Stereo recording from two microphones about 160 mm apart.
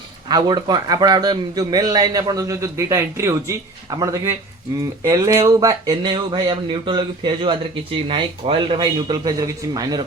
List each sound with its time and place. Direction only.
0.3 s speech: 25° right (ahead or behind)